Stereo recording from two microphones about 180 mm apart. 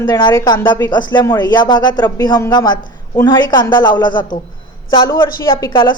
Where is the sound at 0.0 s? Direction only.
25° left (ahead or behind).